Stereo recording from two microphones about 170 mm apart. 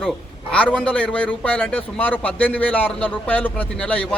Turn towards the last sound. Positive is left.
turn(degrees=5)  # may be behind; listen again after turning